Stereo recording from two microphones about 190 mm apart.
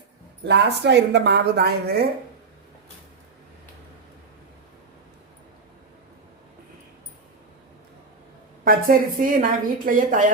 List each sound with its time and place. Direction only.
0.4 s speech: 65° right (ahead or behind)
8.6 s a woman's voice: 50° right (ahead or behind)